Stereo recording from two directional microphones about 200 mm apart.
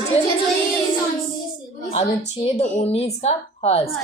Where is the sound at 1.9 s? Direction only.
35° left (ahead or behind).